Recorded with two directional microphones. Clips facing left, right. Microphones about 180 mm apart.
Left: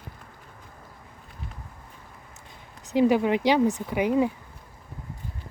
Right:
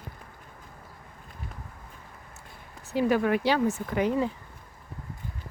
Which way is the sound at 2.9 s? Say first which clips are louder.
Left 3 dB; 15° left (ahead or behind).